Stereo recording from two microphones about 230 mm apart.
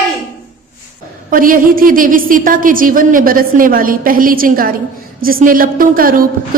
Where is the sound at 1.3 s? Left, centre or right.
Right.